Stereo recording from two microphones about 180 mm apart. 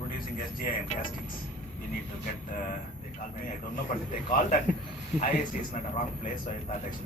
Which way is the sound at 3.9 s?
45° left (ahead or behind).